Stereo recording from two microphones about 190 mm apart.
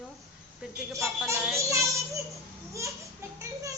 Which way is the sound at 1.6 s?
15° right (ahead or behind).